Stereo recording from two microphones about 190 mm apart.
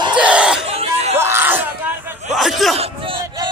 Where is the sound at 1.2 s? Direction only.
10° right (ahead or behind).